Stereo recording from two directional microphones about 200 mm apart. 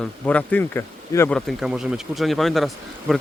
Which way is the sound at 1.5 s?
5° right (ahead or behind).